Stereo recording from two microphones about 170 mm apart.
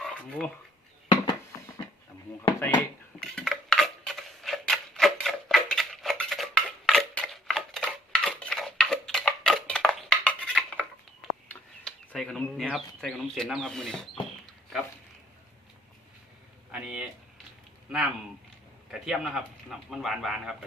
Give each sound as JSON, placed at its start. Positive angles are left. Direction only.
{"t": 0.0, "sound": "dog", "side_deg": 5}
{"t": 1.0, "sound": "a sound", "side_deg": 25}
{"t": 2.6, "sound": "dishes", "side_deg": 10}
{"t": 11.4, "sound": "a sound", "side_deg": 5}
{"t": 16.7, "sound": "speech", "side_deg": -5}
{"t": 18.9, "sound": "speech", "side_deg": -5}